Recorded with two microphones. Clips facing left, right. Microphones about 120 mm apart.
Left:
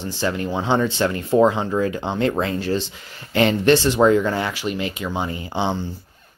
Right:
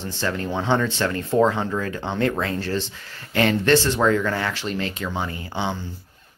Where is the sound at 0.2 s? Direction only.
10° left (ahead or behind).